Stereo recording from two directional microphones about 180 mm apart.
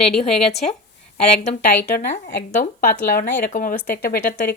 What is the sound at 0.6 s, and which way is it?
Speech, 45° left (ahead or behind).